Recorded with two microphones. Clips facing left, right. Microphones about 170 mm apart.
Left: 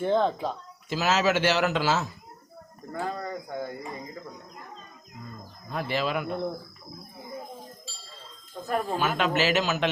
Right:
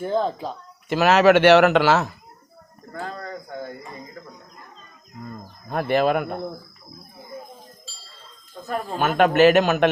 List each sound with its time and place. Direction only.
0.0 s speech: 5° right (ahead or behind)
0.9 s a man's voice: 65° right (ahead or behind)
2.9 s speech: 10° left (ahead or behind)
5.2 s speech: 55° right (ahead or behind)
9.0 s a man's voice: 55° right (ahead or behind)